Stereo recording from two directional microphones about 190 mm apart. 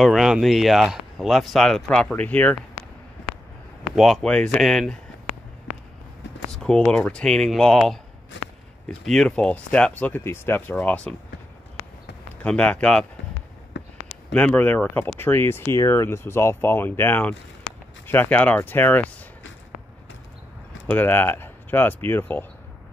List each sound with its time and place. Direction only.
0.0 s speech: centre (ahead or behind)
3.8 s speech: centre (ahead or behind)
6.5 s speech: 5° left (ahead or behind)
12.4 s speech: 5° left (ahead or behind)
13.7 s a sound: 65° left (ahead or behind)
14.3 s speech: 10° left (ahead or behind)
20.8 s speech: 10° left (ahead or behind)